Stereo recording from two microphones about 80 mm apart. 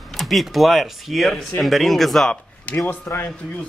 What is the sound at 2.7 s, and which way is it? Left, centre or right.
Speech, left.